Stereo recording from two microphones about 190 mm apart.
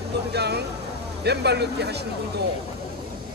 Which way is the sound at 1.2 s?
60° right (ahead or behind).